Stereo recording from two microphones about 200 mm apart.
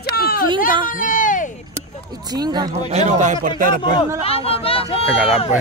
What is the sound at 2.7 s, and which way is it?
Speech, 35° right (ahead or behind).